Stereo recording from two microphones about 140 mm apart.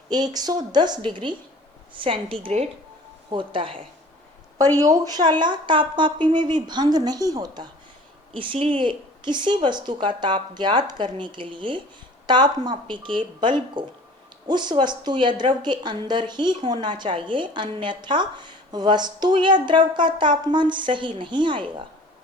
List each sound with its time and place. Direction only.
0.1 s a woman's voice: 30° right (ahead or behind)
4.8 s a woman's voice: 25° right (ahead or behind)